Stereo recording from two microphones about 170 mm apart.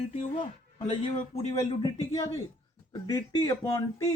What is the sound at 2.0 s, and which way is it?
Speech, 35° left (ahead or behind).